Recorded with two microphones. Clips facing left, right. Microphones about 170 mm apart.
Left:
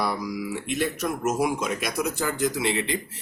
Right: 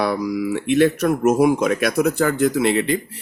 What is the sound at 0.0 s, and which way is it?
Speech, 60° right (ahead or behind).